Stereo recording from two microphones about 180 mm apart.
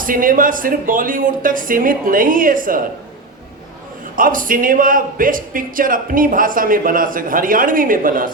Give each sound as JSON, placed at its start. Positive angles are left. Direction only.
{"t": 0.0, "sound": "a man's voice", "side_deg": -50}
{"t": 4.1, "sound": "a man's voice", "side_deg": -50}